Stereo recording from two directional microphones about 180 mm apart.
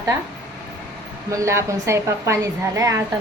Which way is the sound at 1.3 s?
15° right (ahead or behind).